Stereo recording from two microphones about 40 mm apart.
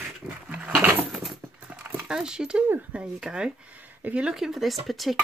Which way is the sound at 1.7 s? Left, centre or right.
Right.